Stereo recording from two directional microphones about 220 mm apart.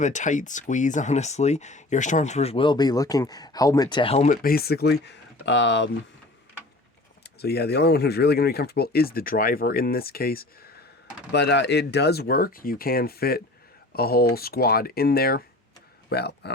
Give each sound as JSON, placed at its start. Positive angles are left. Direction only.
{"t": 0.0, "sound": "speech", "side_deg": 35}
{"t": 4.4, "sound": "speech", "side_deg": 45}
{"t": 7.4, "sound": "speech", "side_deg": 45}